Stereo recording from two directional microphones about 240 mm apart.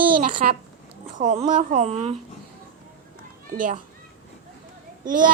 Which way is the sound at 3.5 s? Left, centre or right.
Right.